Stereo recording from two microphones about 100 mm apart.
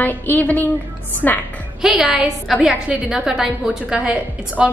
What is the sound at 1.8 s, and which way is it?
A woman's voice, 5° right (ahead or behind).